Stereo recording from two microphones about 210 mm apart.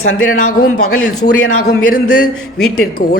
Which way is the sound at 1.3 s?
85° left.